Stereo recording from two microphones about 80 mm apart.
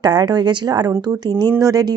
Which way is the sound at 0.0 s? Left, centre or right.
Right.